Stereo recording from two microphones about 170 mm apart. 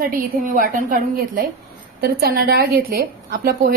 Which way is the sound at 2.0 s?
65° right (ahead or behind).